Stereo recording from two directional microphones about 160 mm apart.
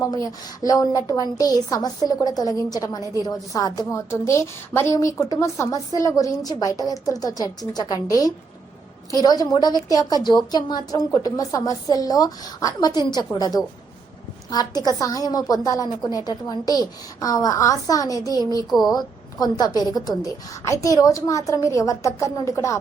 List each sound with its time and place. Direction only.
0.0 s a woman's voice: 20° left (ahead or behind)
3.0 s a woman's voice: 20° right (ahead or behind)
3.2 s a woman's voice: 25° left (ahead or behind)